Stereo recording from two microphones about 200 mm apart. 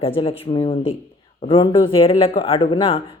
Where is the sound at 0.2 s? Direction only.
25° left (ahead or behind).